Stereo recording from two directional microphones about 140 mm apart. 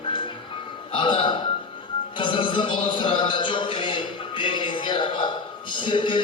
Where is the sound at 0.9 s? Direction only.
35° left (ahead or behind).